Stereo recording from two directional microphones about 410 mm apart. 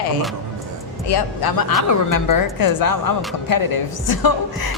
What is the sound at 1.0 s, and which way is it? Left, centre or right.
A woman's voice, left.